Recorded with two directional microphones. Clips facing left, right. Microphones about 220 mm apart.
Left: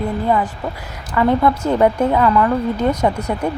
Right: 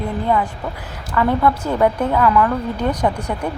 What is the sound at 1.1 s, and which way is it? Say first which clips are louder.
Speech: left 2 dB; 15° left (ahead or behind).